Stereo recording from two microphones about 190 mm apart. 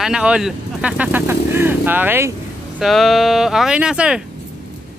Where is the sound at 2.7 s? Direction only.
Centre (ahead or behind).